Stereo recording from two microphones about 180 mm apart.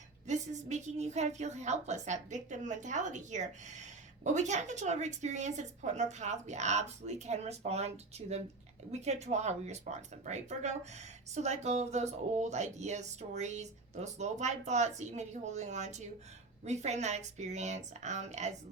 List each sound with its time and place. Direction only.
0.3 s a woman's voice: 40° right (ahead or behind)